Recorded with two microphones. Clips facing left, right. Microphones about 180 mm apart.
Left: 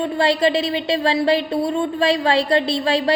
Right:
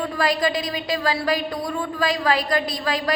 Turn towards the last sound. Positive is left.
turn(degrees=30)  # may be behind; listen again after turning